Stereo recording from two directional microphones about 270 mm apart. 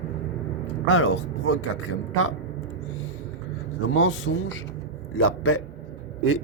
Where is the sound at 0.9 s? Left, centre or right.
Left.